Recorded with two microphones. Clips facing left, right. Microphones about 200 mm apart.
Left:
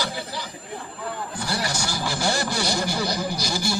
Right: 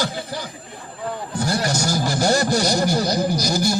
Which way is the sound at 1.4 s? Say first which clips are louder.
Right 7 dB; 45° right (ahead or behind).